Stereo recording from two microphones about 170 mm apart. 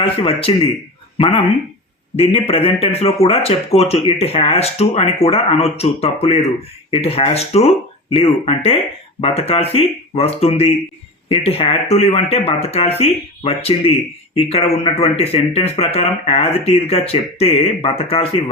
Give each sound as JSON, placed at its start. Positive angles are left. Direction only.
{"t": 0.0, "sound": "speech", "side_deg": 35}
{"t": 2.1, "sound": "speech", "side_deg": 35}